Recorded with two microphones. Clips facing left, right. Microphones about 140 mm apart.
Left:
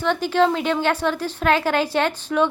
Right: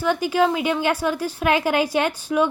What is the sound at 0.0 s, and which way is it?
A woman's voice, 10° right (ahead or behind).